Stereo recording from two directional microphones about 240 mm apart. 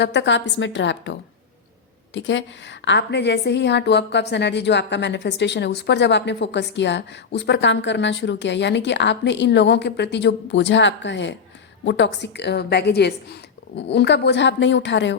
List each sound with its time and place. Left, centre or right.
0.0 s a woman's voice: left
2.1 s a woman's voice: left